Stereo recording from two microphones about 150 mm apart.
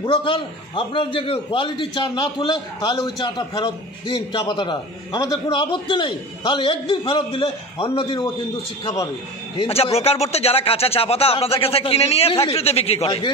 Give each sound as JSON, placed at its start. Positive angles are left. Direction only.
{"t": 0.0, "sound": "a man's voice", "side_deg": 35}
{"t": 9.6, "sound": "a man's voice", "side_deg": 40}